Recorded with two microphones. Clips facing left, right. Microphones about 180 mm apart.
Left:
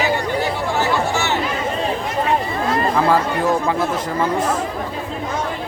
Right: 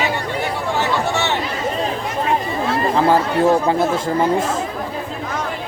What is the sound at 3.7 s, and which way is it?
Speech, 30° right (ahead or behind).